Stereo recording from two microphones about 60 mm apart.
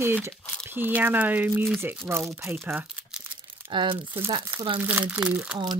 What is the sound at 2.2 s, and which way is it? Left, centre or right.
Speech, right.